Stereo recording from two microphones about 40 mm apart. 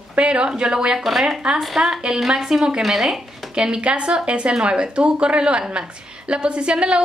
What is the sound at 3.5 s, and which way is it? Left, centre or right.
A woman's voice, right.